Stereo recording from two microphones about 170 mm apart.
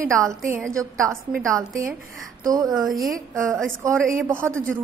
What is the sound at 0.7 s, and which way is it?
A woman's voice, 20° right (ahead or behind).